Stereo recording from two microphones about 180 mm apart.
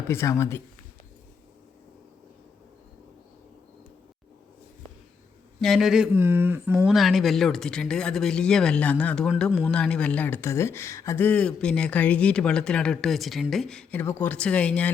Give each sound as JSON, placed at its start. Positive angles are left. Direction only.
{"t": 0.1, "sound": "speech", "side_deg": 15}
{"t": 5.5, "sound": "speech", "side_deg": 0}
{"t": 6.8, "sound": "speech", "side_deg": 0}